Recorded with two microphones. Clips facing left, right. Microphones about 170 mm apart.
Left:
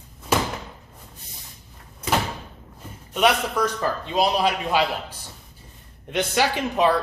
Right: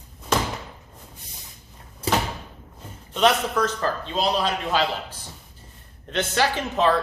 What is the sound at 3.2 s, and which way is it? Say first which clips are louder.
A man's voice: even; 10° left (ahead or behind).